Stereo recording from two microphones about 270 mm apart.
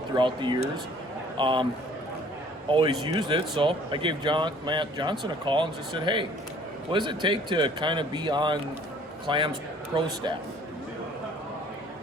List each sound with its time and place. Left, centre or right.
0.2 s speech: centre
2.6 s speech: centre